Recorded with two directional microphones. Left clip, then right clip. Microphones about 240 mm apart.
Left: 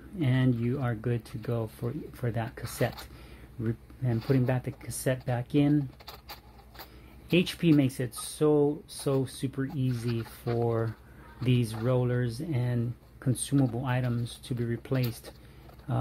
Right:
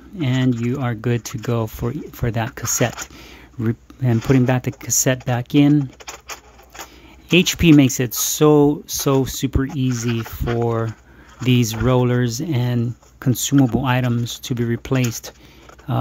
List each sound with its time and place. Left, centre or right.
0.2 s speech: right
7.2 s speech: right